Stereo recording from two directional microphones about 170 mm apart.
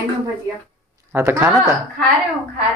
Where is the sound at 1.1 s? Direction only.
15° right (ahead or behind).